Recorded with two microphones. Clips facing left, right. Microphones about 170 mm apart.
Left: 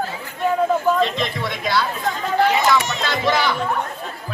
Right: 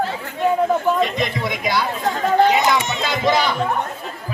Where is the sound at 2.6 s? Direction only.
20° right (ahead or behind).